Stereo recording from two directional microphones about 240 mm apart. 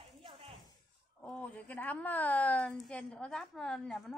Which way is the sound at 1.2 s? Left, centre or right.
Centre.